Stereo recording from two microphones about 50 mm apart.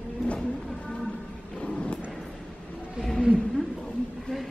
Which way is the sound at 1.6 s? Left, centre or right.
Left.